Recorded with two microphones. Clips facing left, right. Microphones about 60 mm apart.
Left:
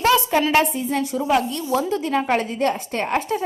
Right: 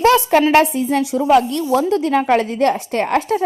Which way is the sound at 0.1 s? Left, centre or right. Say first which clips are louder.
Right 5 dB; right.